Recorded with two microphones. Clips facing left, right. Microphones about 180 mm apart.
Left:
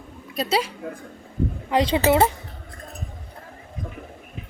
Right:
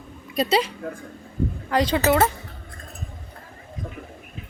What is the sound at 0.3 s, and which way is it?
Speech, 5° left (ahead or behind).